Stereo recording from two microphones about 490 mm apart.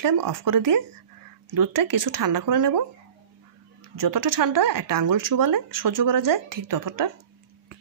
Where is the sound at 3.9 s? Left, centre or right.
Right.